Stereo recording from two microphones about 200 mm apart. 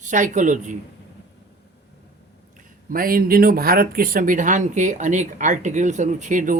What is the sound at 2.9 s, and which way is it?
Speech, 45° right (ahead or behind).